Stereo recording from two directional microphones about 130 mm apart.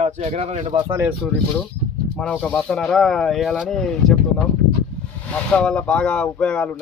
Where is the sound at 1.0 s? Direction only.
5° right (ahead or behind).